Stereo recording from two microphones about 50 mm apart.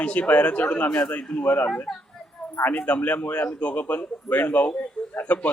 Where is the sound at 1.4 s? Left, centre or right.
Left.